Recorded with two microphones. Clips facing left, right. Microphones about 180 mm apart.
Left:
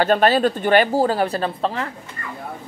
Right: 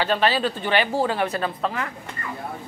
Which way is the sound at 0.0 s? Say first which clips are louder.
Left 5 dB; 45° left (ahead or behind).